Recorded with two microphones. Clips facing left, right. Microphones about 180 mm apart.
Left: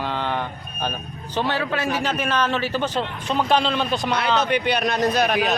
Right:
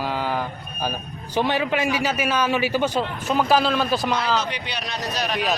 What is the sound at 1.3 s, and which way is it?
A man's voice, 15° right (ahead or behind).